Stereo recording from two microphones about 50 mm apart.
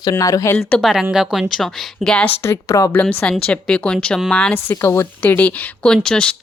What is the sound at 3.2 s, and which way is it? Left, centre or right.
A woman's voice, left.